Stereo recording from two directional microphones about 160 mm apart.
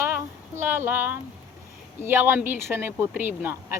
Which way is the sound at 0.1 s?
15° right (ahead or behind).